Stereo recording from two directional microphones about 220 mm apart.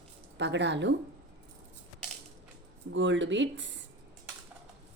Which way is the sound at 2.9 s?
55° right (ahead or behind).